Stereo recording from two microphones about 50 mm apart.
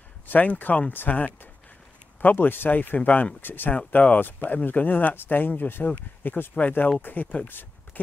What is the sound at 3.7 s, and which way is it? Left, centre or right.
Speech, left.